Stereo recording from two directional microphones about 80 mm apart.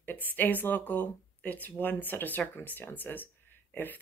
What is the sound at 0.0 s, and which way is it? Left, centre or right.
Speech, left.